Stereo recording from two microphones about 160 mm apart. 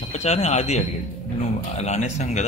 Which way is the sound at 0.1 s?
40° left (ahead or behind).